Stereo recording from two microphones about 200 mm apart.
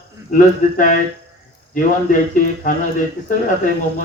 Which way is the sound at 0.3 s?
40° left (ahead or behind).